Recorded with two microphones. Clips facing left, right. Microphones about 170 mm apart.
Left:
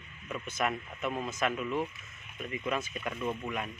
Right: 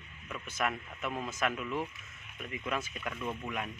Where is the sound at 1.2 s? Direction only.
5° right (ahead or behind).